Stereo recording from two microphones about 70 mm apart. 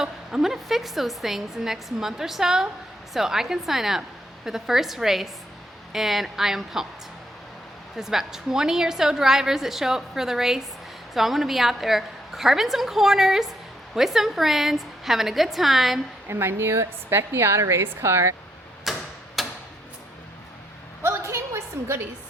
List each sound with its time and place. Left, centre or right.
0.0 s a woman's voice: centre
7.9 s a woman's voice: centre
16.3 s a woman's voice: right
18.9 s tick-tock: centre
21.0 s a sound: right